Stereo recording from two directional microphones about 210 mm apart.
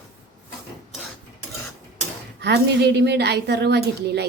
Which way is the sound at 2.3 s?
50° right (ahead or behind).